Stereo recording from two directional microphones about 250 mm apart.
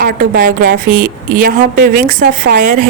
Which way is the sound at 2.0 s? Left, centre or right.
Right.